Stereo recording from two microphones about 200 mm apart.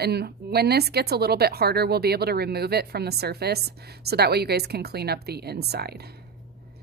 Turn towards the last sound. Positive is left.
turn(degrees=-55)  # may be behind; listen again after turning